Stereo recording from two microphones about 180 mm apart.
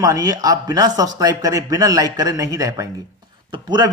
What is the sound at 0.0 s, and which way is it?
A man's voice, 20° right (ahead or behind).